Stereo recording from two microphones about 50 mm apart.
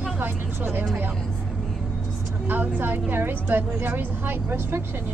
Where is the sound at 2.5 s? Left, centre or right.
Right.